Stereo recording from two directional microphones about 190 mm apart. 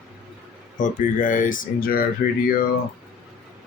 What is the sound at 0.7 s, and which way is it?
Speech, 45° left (ahead or behind).